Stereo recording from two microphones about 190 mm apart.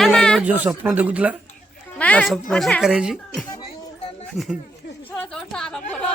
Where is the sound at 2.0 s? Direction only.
5° left (ahead or behind).